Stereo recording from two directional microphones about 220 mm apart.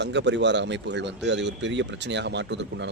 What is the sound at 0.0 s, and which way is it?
Speech, 50° right (ahead or behind).